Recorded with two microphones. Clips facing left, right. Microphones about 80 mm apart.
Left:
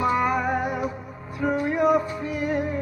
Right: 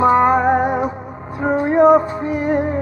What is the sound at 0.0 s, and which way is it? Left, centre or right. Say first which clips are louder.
Music: right 9 dB; right.